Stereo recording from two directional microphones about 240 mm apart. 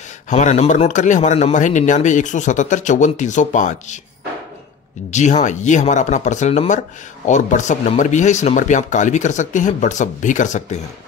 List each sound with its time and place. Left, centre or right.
0.3 s speech: left
5.1 s speech: left